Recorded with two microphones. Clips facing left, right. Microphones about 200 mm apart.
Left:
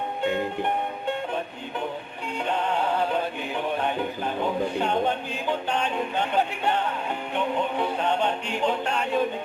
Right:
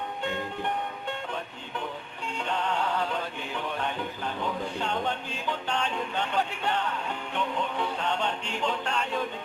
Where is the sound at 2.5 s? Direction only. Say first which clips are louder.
Left 4 dB; 15° left (ahead or behind).